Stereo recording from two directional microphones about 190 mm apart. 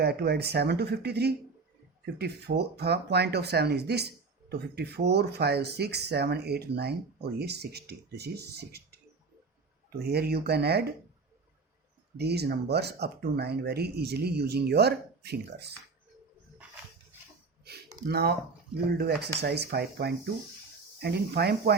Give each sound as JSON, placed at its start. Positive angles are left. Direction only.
{"t": 0.0, "sound": "speech", "side_deg": -55}
{"t": 10.0, "sound": "speech", "side_deg": -55}
{"t": 12.1, "sound": "speech", "side_deg": -60}
{"t": 18.1, "sound": "speech", "side_deg": -55}